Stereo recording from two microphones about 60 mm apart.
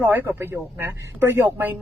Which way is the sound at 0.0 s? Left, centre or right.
Right.